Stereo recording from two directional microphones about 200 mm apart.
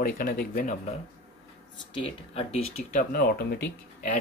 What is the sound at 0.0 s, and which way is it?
Speech, 45° left (ahead or behind).